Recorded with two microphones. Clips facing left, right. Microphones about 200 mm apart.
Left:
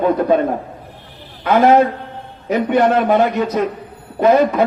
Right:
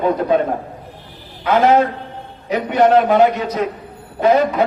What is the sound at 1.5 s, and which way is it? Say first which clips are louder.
A man's voice: left 2 dB; 50° left (ahead or behind).